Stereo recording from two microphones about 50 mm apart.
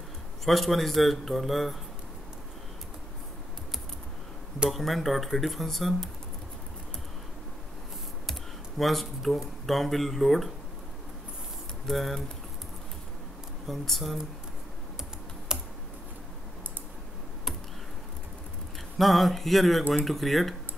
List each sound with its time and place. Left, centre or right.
0.5 s speech: centre
4.6 s speech: centre
8.3 s speech: centre
11.9 s speech: centre
13.7 s speech: centre
15.5 s computer keyboard: centre
18.9 s speech: centre